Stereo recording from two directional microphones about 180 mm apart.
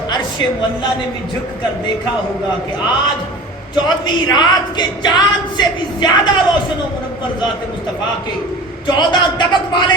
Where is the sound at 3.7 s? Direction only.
25° left (ahead or behind).